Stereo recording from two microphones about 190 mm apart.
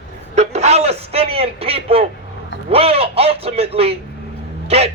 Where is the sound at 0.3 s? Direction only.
35° right (ahead or behind).